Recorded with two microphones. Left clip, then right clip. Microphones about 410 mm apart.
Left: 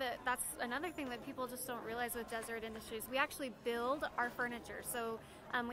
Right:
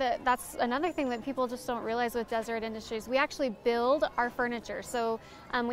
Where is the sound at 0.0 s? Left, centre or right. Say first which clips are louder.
Right 11 dB; right.